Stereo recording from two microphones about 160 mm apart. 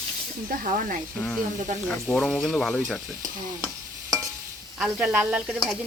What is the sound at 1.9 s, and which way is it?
Speech, 10° left (ahead or behind).